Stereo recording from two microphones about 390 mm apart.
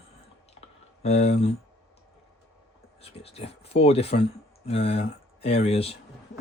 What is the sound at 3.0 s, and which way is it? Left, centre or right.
Speech, centre.